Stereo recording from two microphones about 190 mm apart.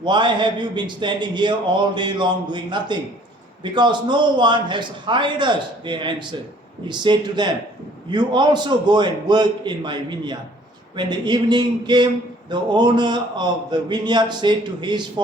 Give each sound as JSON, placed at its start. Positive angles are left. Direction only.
{"t": 0.0, "sound": "a man's voice", "side_deg": -25}